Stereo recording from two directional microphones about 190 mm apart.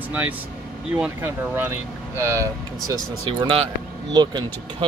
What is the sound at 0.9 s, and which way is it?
Speech, 10° right (ahead or behind).